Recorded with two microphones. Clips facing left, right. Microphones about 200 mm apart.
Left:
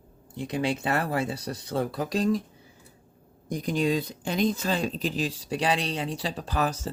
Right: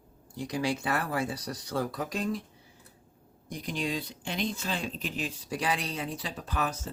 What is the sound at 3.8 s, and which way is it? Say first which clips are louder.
Speech: left 7 dB; 40° left (ahead or behind).